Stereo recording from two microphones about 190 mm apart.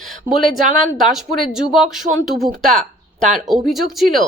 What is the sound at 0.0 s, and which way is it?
Speech, centre (ahead or behind).